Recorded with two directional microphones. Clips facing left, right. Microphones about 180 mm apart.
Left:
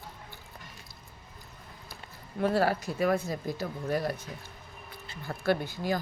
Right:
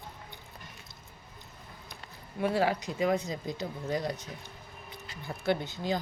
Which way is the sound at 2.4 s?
15° right (ahead or behind).